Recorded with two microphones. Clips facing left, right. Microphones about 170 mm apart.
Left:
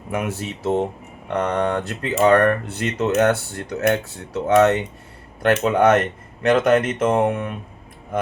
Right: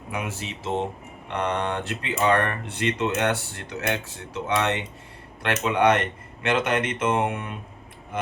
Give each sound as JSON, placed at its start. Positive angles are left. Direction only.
{"t": 0.1, "sound": "speech", "side_deg": 45}